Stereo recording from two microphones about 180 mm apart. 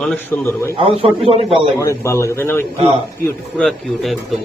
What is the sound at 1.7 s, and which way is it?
Speech, 15° left (ahead or behind).